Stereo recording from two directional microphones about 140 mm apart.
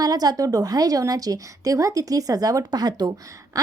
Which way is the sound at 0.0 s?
25° right (ahead or behind).